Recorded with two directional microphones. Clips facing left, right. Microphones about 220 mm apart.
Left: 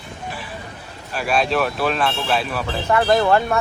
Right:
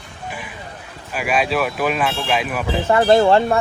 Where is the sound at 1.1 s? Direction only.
10° right (ahead or behind).